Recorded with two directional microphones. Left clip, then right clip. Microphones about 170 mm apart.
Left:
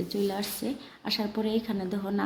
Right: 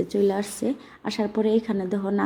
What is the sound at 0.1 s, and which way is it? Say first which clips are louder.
A woman's voice: right 6 dB; 15° right (ahead or behind).